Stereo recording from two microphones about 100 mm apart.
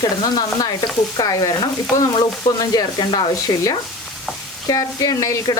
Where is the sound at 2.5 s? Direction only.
40° left (ahead or behind).